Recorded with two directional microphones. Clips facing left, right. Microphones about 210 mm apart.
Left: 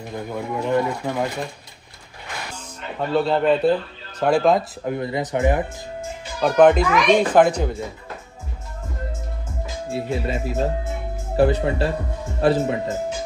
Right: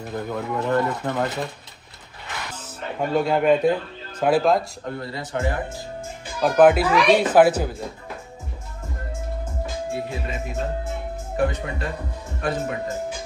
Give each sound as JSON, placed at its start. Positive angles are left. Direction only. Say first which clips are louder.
{"t": 0.1, "sound": "speech", "louder": "even", "side_deg": 10}
{"t": 3.0, "sound": "a man's voice", "louder": "left 1 dB", "side_deg": -10}
{"t": 4.8, "sound": "speech", "louder": "left 6 dB", "side_deg": 15}
{"t": 6.4, "sound": "a child's voice", "louder": "left 1 dB", "side_deg": -5}
{"t": 9.9, "sound": "speech", "louder": "left 5 dB", "side_deg": 35}